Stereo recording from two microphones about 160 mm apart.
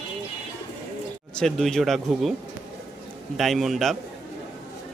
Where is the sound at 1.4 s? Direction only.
5° left (ahead or behind).